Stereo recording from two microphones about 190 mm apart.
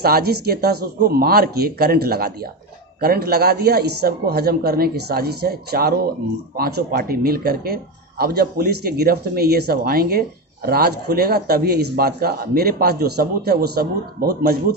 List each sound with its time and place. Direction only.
0.0 s speech: 55° right (ahead or behind)